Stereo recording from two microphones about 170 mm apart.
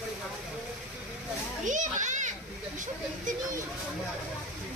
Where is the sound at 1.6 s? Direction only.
45° right (ahead or behind).